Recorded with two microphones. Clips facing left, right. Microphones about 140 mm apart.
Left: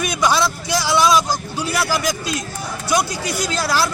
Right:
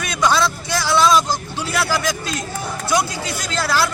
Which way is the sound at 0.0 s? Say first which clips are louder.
Even; 15° left (ahead or behind).